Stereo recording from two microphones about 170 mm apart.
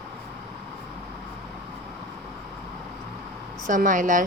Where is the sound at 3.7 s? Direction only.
50° right (ahead or behind).